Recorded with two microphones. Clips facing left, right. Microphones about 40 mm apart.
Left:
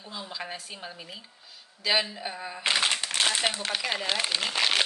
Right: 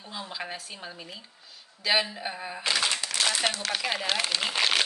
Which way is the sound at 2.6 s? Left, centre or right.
Left.